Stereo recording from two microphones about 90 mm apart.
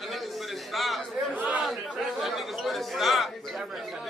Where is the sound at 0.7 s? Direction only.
Centre (ahead or behind).